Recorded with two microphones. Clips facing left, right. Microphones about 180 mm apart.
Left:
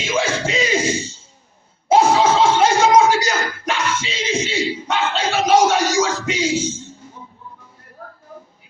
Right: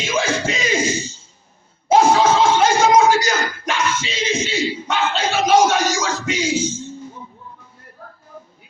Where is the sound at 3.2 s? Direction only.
30° left (ahead or behind).